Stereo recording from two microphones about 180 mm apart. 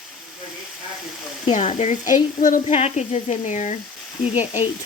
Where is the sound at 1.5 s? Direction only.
40° left (ahead or behind).